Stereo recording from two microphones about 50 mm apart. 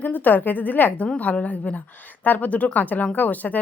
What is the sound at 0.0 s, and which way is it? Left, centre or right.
Speech, left.